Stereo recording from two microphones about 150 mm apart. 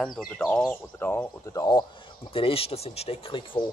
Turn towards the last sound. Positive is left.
turn(degrees=35)  # may be behind; listen again after turning